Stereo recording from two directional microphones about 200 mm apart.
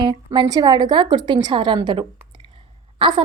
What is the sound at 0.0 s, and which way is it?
A woman's voice, 20° right (ahead or behind).